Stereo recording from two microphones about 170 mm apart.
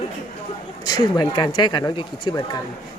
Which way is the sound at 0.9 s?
25° left (ahead or behind).